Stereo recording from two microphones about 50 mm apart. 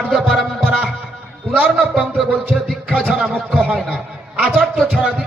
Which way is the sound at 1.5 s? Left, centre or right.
Right.